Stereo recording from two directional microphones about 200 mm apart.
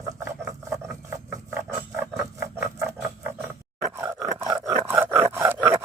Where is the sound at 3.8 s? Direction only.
15° right (ahead or behind).